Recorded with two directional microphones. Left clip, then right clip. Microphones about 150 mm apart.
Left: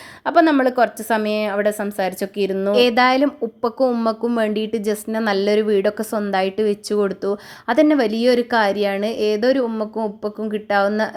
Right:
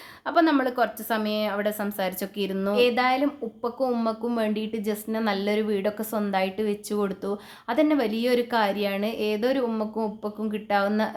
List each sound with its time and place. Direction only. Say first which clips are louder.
0.3 s a woman's voice: left 7 dB; 45° left (ahead or behind)
2.7 s a woman's voice: left 7 dB; 50° left (ahead or behind); by 11.1 s 35° left (ahead or behind)